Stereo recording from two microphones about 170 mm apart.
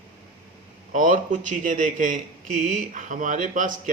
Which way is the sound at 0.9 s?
50° right (ahead or behind).